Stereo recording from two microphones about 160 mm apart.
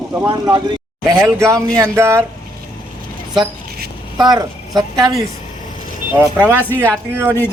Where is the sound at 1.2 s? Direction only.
15° right (ahead or behind).